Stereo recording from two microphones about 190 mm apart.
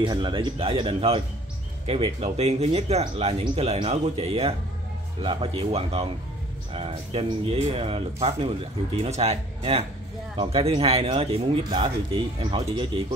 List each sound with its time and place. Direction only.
0.0 s speech: 25° right (ahead or behind)